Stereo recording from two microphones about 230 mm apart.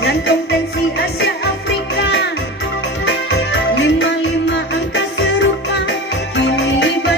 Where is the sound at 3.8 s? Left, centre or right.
Left.